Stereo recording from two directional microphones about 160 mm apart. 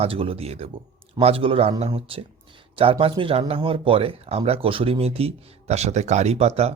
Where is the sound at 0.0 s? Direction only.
35° right (ahead or behind).